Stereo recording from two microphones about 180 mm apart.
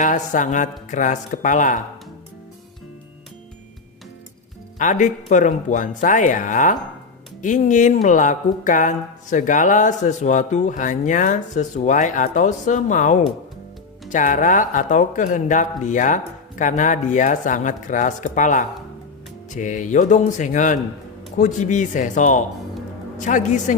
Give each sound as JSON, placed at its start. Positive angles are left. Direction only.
{"t": 0.0, "sound": "speech", "side_deg": 45}
{"t": 4.8, "sound": "speech", "side_deg": 45}